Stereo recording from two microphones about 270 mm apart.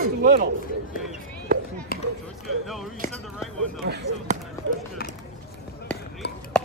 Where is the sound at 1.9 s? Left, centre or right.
Left.